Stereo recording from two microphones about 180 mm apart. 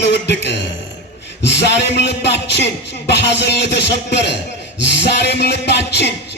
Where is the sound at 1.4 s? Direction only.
70° left (ahead or behind).